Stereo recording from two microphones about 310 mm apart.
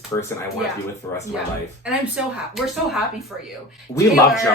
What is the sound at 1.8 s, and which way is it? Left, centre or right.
Speech, centre.